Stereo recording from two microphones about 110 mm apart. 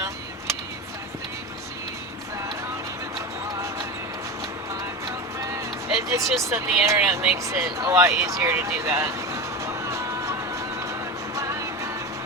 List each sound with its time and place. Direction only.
6.1 s speech: 30° right (ahead or behind)
7.4 s vehicle: 30° right (ahead or behind)
11.3 s music: 30° right (ahead or behind)